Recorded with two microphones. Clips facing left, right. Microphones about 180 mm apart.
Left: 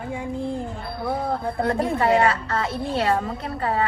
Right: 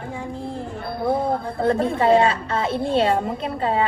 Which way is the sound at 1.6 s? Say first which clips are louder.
Right 3 dB; 25° right (ahead or behind).